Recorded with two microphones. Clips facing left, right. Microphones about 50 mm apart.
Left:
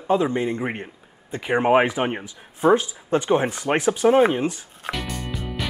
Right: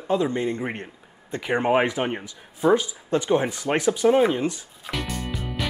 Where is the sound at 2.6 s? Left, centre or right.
Left.